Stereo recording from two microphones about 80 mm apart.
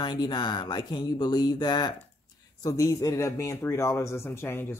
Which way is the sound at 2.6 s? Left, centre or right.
Left.